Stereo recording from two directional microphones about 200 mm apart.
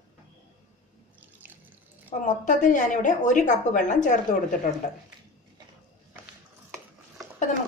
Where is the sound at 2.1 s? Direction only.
35° left (ahead or behind).